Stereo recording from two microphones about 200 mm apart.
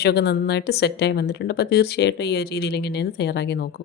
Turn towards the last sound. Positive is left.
turn(degrees=55)  # may be behind; listen again after turning